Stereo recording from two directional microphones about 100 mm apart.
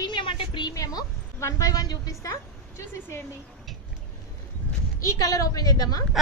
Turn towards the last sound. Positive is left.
turn(degrees=40)  # may be behind; listen again after turning